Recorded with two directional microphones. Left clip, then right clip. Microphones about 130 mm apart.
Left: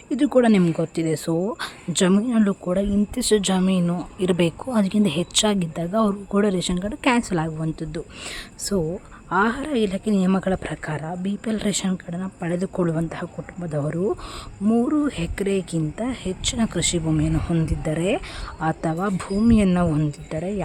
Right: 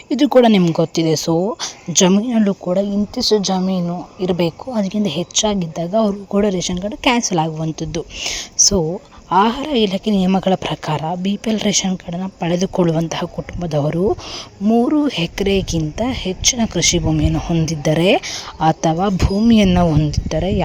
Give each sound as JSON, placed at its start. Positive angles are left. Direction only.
{"t": 0.1, "sound": "a woman's voice", "side_deg": -25}
{"t": 10.5, "sound": "speech", "side_deg": -35}
{"t": 17.7, "sound": "speech", "side_deg": -35}